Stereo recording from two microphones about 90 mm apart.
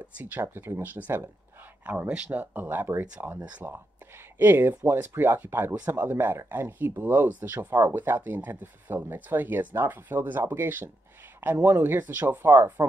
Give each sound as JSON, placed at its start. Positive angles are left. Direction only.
{"t": 0.2, "sound": "speech", "side_deg": -20}